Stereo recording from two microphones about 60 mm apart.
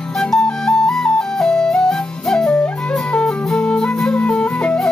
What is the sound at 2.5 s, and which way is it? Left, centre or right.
Flute, centre.